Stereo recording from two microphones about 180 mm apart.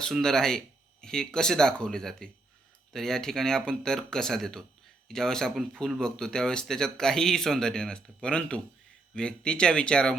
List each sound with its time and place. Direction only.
0.0 s speech: 5° left (ahead or behind)